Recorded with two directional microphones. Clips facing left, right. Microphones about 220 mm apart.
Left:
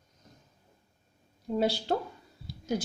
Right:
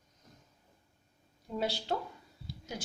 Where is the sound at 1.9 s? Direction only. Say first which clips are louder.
Left 5 dB; 40° left (ahead or behind).